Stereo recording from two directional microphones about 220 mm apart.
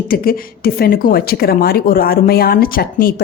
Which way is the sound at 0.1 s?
45° left (ahead or behind).